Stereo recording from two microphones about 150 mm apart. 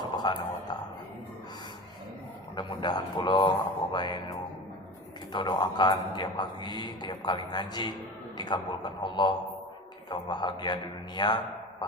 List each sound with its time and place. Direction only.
0.0 s a man's voice: 30° left (ahead or behind)
2.6 s a man's voice: 30° left (ahead or behind)